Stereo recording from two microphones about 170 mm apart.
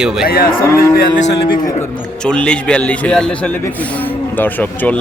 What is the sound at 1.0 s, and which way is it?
Speech, 90° left.